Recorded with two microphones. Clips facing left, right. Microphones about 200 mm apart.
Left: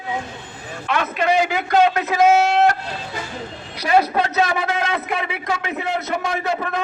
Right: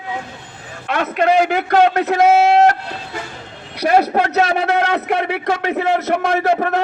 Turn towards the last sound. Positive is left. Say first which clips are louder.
# right 7 dB
turn(degrees=-65)  # may be behind; listen again after turning